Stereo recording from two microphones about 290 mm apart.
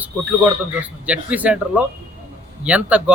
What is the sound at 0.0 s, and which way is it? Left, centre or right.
Speech, centre.